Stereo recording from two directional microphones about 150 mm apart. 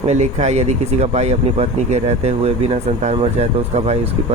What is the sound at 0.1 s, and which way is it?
Speech, 50° right (ahead or behind).